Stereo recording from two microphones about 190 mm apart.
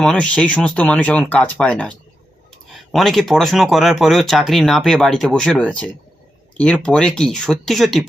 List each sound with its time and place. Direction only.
0.0 s speech: 5° left (ahead or behind)